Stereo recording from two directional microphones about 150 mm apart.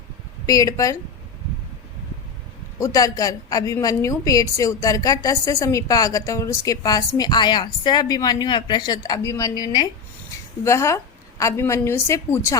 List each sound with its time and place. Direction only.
0.4 s a woman's voice: 25° left (ahead or behind)
2.7 s a woman's voice: 20° left (ahead or behind)